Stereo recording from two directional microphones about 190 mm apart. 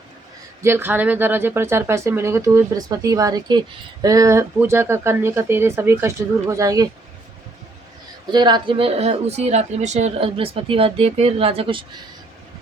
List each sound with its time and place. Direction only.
0.6 s speech: 10° right (ahead or behind)
8.3 s speech: 25° right (ahead or behind)